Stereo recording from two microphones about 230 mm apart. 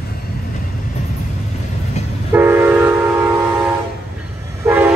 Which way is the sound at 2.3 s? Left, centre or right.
Centre.